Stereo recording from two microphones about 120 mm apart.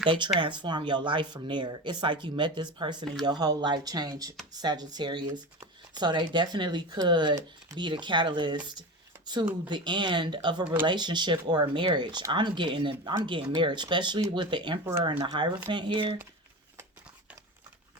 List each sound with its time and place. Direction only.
0.0 s speech: 45° right (ahead or behind)